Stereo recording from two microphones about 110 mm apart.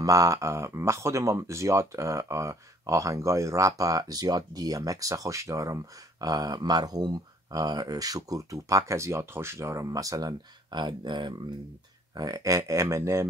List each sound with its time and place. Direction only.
0.0 s speech: 30° right (ahead or behind)